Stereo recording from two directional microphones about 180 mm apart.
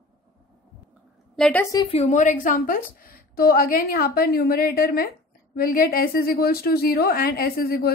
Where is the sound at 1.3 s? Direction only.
5° left (ahead or behind).